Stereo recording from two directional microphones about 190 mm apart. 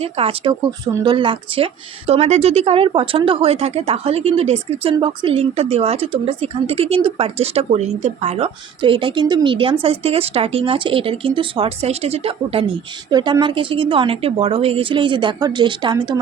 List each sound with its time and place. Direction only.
0.0 s a woman's voice: 30° right (ahead or behind)